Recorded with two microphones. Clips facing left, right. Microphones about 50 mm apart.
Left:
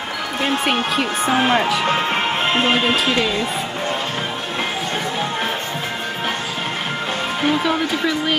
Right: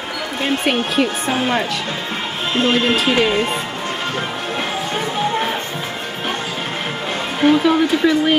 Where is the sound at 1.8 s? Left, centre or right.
Left.